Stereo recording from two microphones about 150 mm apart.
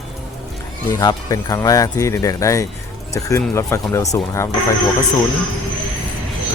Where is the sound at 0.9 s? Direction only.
25° left (ahead or behind).